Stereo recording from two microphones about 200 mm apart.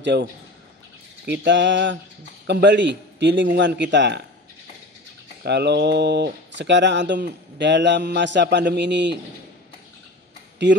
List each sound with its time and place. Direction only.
0.0 s a man's voice: 60° right (ahead or behind)
1.3 s speech: 60° right (ahead or behind)
5.4 s speech: 55° right (ahead or behind)
10.7 s speech: 65° right (ahead or behind)